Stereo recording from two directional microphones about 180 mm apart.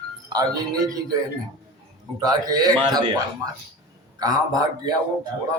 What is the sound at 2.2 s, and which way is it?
A man's voice, 20° right (ahead or behind).